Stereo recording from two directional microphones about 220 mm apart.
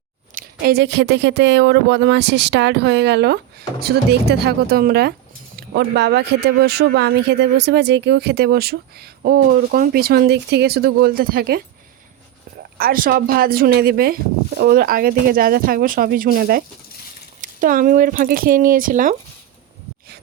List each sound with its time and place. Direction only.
0.6 s speech: 45° right (ahead or behind)
12.8 s speech: 40° right (ahead or behind)